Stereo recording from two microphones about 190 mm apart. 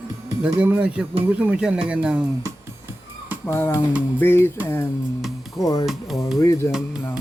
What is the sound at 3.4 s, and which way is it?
Speech, 15° left (ahead or behind).